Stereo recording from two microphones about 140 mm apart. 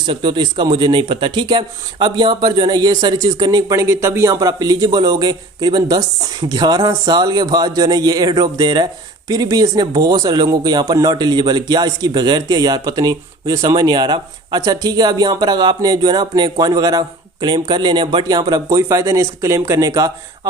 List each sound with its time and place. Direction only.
0.0 s a man's voice: 35° right (ahead or behind)